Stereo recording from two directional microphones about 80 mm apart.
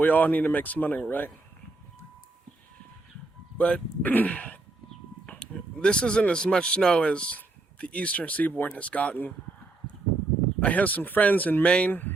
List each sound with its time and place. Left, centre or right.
0.0 s speech: left
3.6 s speech: centre
10.6 s speech: centre